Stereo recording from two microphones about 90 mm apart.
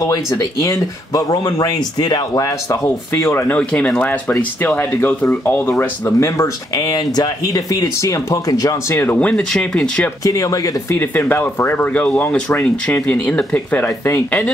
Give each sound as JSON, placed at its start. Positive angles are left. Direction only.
{"t": 0.0, "sound": "speech", "side_deg": 35}
{"t": 3.1, "sound": "speech", "side_deg": 30}
{"t": 3.5, "sound": "speech", "side_deg": 10}
{"t": 6.0, "sound": "speech", "side_deg": 35}
{"t": 8.9, "sound": "speech", "side_deg": 25}
{"t": 9.2, "sound": "speech", "side_deg": 10}
{"t": 10.2, "sound": "speech", "side_deg": 40}
{"t": 10.9, "sound": "speech", "side_deg": 25}